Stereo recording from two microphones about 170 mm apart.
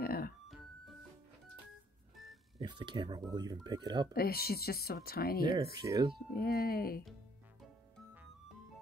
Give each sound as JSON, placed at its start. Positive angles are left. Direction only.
{"t": 0.0, "sound": "music", "side_deg": 60}
{"t": 0.5, "sound": "music", "side_deg": 0}
{"t": 2.6, "sound": "speech", "side_deg": -25}
{"t": 4.1, "sound": "speech", "side_deg": 65}
{"t": 5.8, "sound": "speech", "side_deg": -20}
{"t": 6.3, "sound": "speech", "side_deg": 65}